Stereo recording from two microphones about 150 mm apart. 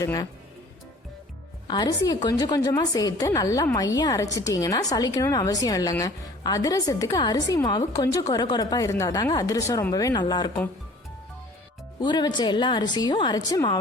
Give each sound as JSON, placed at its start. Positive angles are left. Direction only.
{"t": 0.0, "sound": "a woman's voice", "side_deg": 25}
{"t": 1.6, "sound": "a woman's voice", "side_deg": 25}
{"t": 11.9, "sound": "a woman's voice", "side_deg": 30}